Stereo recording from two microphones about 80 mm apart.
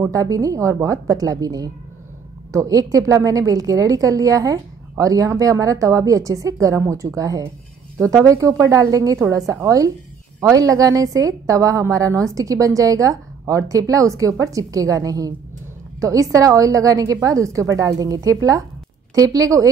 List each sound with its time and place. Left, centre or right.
0.1 s a woman's voice: right